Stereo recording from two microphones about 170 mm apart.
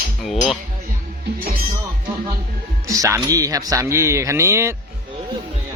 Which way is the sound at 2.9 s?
15° right (ahead or behind).